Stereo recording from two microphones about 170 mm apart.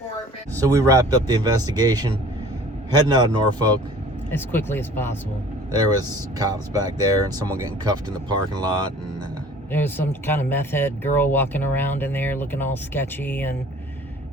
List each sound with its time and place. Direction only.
0.7 s speech: 20° right (ahead or behind)
4.3 s speech: 10° left (ahead or behind)
5.7 s speech: 20° right (ahead or behind)
9.7 s speech: 10° left (ahead or behind)